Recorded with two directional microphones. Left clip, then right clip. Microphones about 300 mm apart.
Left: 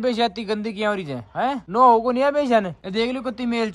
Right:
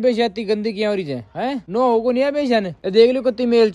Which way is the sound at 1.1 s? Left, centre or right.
Centre.